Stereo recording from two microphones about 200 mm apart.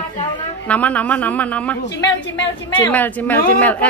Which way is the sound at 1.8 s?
60° left (ahead or behind).